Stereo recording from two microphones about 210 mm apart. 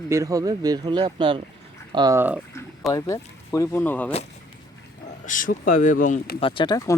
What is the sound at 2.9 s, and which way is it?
Speech, 15° left (ahead or behind).